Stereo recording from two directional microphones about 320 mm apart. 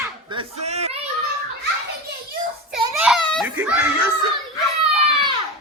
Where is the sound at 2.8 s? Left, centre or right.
Centre.